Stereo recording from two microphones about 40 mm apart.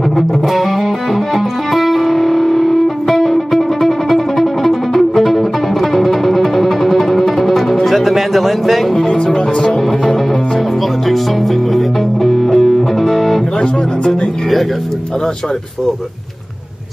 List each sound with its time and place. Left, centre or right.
0.5 s music: centre
9.1 s music: centre
13.6 s speech: centre